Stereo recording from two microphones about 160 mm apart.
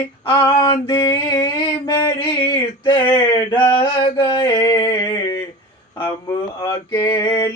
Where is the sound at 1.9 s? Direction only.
30° left (ahead or behind).